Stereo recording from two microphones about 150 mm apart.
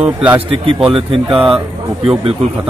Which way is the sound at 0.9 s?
40° right (ahead or behind).